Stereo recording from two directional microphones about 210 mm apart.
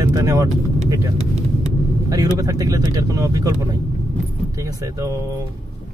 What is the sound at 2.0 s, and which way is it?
Speech, 15° right (ahead or behind).